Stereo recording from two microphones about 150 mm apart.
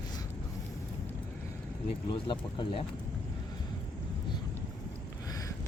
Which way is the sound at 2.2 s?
30° left (ahead or behind).